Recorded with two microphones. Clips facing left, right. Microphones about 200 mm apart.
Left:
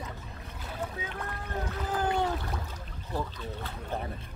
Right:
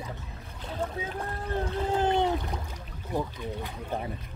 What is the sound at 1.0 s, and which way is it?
Speech, 30° right (ahead or behind).